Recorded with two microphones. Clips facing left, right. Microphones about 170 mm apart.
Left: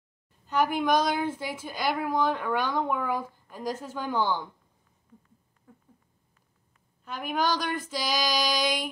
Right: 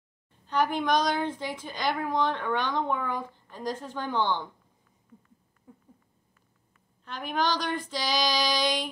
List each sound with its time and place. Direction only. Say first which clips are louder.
0.5 s a woman's voice: left 1 dB; 10° left (ahead or behind)
5.7 s a sound: right 3 dB; 15° right (ahead or behind)
7.1 s a woman's voice: left 1 dB; 10° left (ahead or behind)